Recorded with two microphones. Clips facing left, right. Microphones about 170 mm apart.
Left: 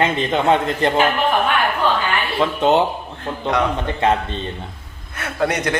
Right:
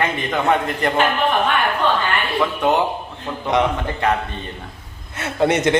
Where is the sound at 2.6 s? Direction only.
20° left (ahead or behind).